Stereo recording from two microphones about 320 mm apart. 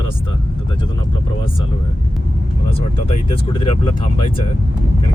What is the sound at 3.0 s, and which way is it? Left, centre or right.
Speech, centre.